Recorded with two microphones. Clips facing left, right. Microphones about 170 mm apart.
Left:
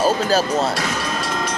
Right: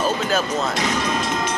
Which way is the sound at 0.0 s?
35° left (ahead or behind).